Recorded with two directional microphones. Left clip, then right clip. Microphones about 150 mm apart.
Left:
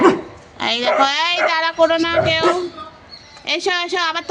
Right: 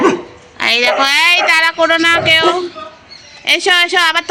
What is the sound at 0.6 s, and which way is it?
A woman's voice, 15° left (ahead or behind).